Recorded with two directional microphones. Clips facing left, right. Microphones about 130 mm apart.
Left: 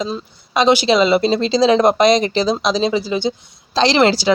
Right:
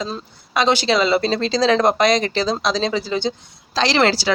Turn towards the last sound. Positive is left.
turn(degrees=20)  # may be behind; listen again after turning